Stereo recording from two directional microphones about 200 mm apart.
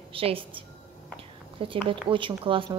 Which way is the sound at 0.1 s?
25° right (ahead or behind).